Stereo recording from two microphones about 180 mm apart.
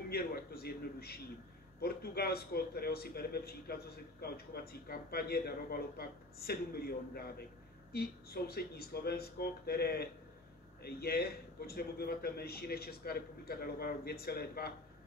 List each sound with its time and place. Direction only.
0.1 s a man's voice: 60° left (ahead or behind)